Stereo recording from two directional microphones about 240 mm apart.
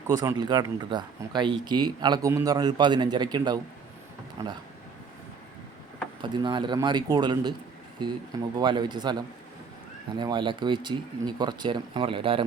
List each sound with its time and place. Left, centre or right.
0.1 s speech: centre
6.2 s speech: centre
8.5 s speech: centre